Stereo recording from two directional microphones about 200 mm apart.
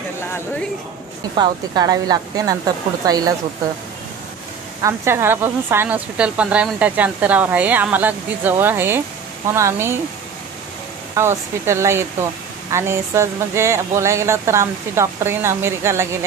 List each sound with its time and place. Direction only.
1.3 s speech: 20° right (ahead or behind)
4.8 s speech: 10° right (ahead or behind)
11.1 s speech: 15° right (ahead or behind)